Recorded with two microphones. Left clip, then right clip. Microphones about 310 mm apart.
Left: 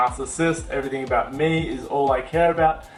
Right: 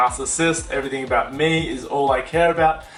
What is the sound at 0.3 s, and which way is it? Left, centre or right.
Speech, centre.